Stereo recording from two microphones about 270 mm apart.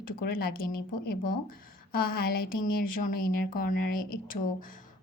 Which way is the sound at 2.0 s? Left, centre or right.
Left.